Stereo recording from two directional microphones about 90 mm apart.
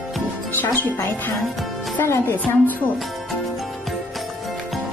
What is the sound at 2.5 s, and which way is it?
Speech, 25° left (ahead or behind).